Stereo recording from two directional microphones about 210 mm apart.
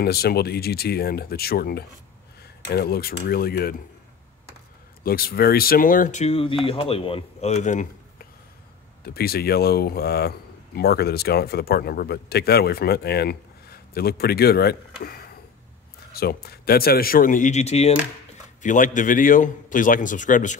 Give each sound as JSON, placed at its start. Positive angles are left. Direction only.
{"t": 0.0, "sound": "a man's voice", "side_deg": 50}
{"t": 5.0, "sound": "a man's voice", "side_deg": 45}